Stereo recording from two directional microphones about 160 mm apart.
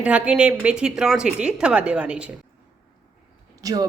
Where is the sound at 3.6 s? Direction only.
25° right (ahead or behind).